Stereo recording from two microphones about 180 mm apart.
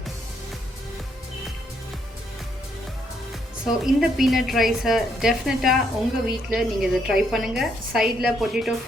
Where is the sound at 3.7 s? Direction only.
Centre (ahead or behind).